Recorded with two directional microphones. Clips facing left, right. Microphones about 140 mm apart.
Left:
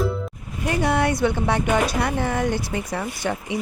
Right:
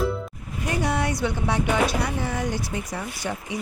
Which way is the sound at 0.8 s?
60° left (ahead or behind).